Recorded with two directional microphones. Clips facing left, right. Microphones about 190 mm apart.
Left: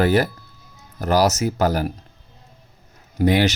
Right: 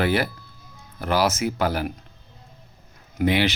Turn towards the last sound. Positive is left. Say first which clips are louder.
# left 3 dB
turn(degrees=40)  # may be behind; listen again after turning